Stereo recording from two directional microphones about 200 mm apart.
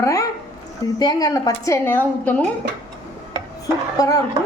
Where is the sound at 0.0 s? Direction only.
15° left (ahead or behind).